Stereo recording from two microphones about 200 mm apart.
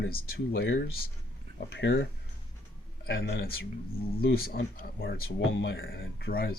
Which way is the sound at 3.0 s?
50° left (ahead or behind).